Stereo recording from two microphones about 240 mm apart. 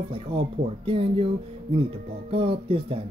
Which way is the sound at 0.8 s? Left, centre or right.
Right.